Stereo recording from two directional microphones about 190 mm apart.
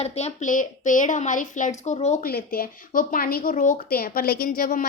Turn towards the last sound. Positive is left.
turn(degrees=50)  # may be behind; listen again after turning